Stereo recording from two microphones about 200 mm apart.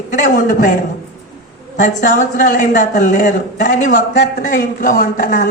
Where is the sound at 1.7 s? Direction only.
40° left (ahead or behind).